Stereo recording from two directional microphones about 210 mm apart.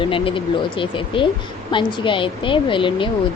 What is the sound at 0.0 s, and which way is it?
A woman's voice, 25° left (ahead or behind).